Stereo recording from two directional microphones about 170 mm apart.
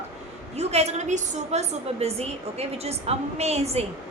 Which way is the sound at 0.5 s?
40° right (ahead or behind).